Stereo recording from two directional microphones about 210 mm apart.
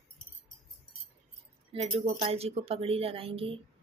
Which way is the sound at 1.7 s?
30° right (ahead or behind).